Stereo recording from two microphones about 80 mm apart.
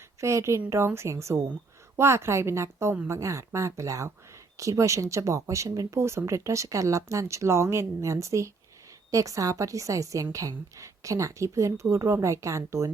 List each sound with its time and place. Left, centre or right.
0.2 s a woman's voice: right